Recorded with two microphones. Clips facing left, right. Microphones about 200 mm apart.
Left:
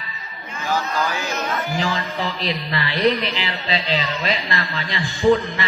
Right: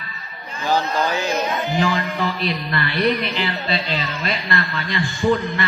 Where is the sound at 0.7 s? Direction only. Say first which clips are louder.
Right 3 dB; 25° right (ahead or behind).